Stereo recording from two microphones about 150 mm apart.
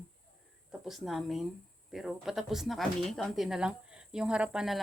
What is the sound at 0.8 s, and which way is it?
Speech, centre (ahead or behind).